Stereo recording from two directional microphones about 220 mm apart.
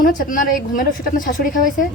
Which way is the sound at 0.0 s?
40° left (ahead or behind).